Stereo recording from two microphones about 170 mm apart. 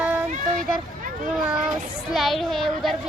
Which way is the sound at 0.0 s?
10° right (ahead or behind).